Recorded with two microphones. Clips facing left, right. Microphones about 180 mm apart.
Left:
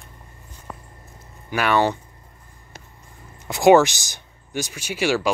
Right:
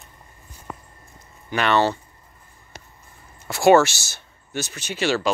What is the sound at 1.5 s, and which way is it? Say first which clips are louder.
Speech: even; 10° left (ahead or behind).